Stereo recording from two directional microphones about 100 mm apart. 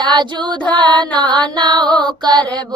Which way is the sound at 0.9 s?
50° right (ahead or behind).